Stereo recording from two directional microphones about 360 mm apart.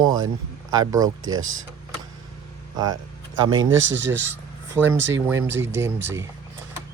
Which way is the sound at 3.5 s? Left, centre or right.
Right.